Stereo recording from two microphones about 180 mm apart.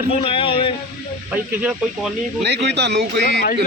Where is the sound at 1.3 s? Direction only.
10° right (ahead or behind).